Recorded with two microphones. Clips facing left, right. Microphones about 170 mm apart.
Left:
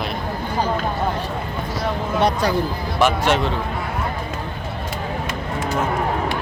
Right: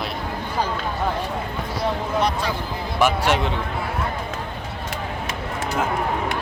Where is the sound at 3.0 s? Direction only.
10° right (ahead or behind).